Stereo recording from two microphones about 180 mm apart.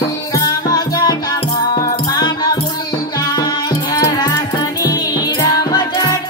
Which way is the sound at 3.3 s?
20° left (ahead or behind).